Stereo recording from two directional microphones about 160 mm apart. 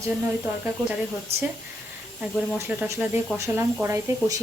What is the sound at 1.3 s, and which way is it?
Speech, 40° right (ahead or behind).